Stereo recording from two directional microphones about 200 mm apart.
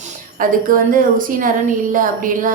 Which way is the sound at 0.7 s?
45° right (ahead or behind).